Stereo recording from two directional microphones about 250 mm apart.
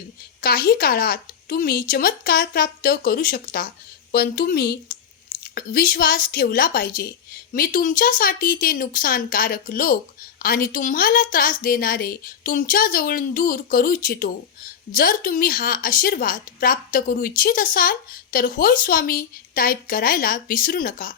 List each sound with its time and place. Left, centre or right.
0.4 s a woman's voice: left